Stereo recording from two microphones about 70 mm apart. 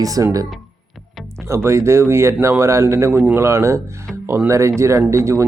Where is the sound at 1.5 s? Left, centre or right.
Right.